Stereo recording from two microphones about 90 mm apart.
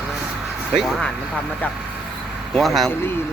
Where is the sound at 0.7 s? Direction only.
Centre (ahead or behind).